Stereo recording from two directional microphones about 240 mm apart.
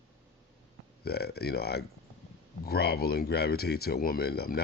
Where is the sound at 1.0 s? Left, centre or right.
Left.